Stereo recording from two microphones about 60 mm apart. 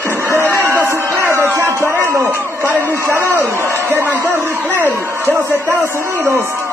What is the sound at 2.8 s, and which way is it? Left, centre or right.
Speech, left.